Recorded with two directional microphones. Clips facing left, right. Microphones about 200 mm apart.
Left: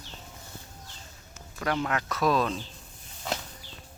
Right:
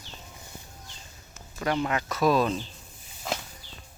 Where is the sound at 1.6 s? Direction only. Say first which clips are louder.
Right 2 dB; 5° right (ahead or behind).